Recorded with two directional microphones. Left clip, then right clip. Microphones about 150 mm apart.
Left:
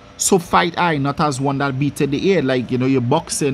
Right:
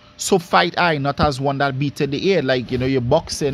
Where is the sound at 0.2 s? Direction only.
30° right (ahead or behind).